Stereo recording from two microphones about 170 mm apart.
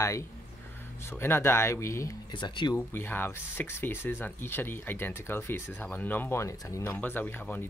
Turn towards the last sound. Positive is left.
turn(degrees=10)  # may be behind; listen again after turning